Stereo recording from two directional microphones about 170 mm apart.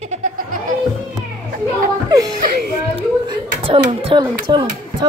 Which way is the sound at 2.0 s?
25° right (ahead or behind).